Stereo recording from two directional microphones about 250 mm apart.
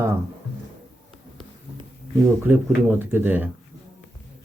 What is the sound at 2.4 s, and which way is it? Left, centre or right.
Speech, centre.